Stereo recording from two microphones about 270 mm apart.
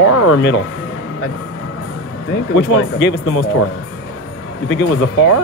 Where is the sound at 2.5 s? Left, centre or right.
Left.